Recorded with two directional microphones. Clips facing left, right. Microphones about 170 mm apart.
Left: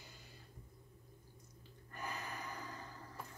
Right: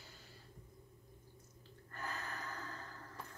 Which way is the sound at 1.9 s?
15° left (ahead or behind).